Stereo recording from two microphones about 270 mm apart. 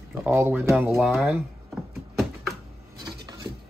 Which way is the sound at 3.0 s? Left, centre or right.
Centre.